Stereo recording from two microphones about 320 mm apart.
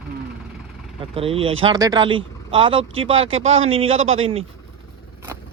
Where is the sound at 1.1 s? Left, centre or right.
Centre.